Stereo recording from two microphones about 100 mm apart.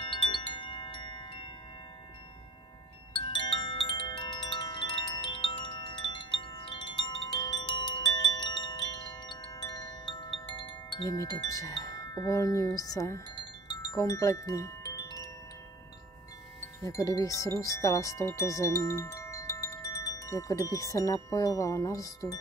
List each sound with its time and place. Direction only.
0.0 s wind chime: 60° left (ahead or behind)
3.3 s wind chime: 50° left (ahead or behind)
11.1 s speech: 35° left (ahead or behind)
13.4 s wind chime: 45° left (ahead or behind)
14.0 s chime: 35° left (ahead or behind)
16.8 s chime: 35° left (ahead or behind)